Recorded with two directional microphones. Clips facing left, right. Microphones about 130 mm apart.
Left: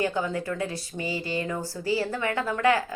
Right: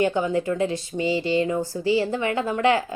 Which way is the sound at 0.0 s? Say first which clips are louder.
Right 5 dB; 20° right (ahead or behind).